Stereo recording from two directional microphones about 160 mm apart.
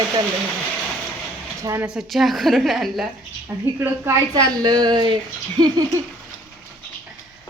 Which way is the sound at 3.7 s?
15° right (ahead or behind).